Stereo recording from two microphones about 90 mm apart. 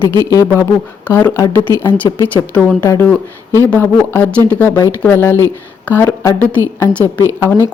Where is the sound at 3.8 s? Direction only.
20° left (ahead or behind).